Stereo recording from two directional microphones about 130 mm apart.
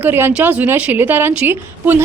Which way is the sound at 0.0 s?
15° right (ahead or behind).